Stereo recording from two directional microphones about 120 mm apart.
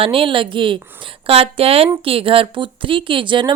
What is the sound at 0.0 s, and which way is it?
A woman's voice, 50° right (ahead or behind).